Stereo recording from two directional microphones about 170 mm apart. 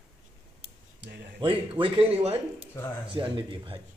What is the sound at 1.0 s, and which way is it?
Speech, 70° right (ahead or behind).